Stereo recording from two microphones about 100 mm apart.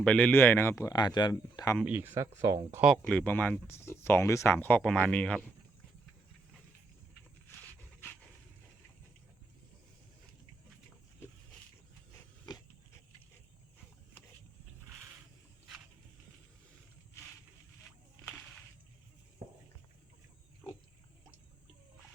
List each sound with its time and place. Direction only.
0.0 s speech: 15° left (ahead or behind)
0.9 s speech: 45° left (ahead or behind)
1.8 s speech: 20° right (ahead or behind)
2.2 s speech: 35° right (ahead or behind)
2.8 s speech: 5° left (ahead or behind)
12.1 s dog: 30° left (ahead or behind)